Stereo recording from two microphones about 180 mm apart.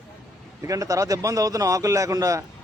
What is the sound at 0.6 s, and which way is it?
Speech, 20° right (ahead or behind).